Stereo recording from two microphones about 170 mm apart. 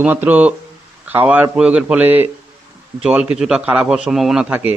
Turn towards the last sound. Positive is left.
turn(degrees=-10)  # may be behind; listen again after turning